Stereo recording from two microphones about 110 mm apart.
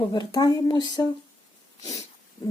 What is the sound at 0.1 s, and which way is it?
Speech, 40° left (ahead or behind).